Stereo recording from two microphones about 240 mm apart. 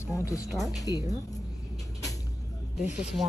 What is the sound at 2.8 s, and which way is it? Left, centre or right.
Speech, centre.